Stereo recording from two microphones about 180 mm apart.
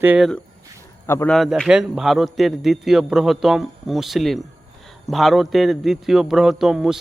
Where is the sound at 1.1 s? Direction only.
15° left (ahead or behind).